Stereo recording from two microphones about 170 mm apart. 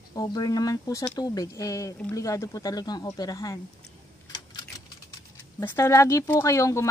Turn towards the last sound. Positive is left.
turn(degrees=15)  # may be behind; listen again after turning